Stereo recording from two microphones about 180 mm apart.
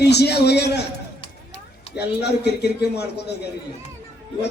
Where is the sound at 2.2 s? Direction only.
70° left (ahead or behind).